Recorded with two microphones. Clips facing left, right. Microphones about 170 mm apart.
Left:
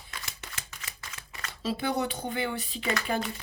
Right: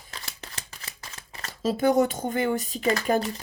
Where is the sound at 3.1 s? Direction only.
40° right (ahead or behind).